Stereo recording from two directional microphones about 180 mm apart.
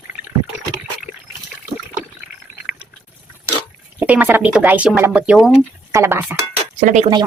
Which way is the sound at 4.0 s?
10° right (ahead or behind).